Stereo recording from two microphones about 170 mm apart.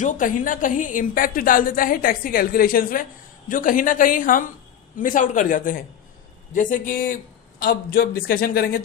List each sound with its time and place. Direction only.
0.0 s a woman's voice: 50° left (ahead or behind)
7.6 s a woman's voice: 65° left (ahead or behind)